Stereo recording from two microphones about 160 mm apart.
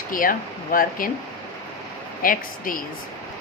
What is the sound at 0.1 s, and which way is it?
Speech, 60° left (ahead or behind).